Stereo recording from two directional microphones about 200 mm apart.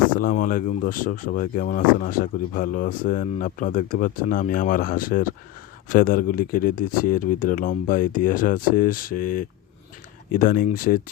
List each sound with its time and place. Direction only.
0.2 s speech: 45° left (ahead or behind)